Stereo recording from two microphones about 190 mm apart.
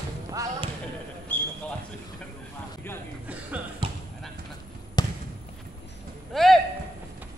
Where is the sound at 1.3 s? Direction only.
10° left (ahead or behind).